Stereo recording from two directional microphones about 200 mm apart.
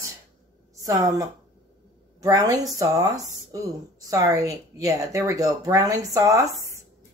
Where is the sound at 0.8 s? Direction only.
15° right (ahead or behind).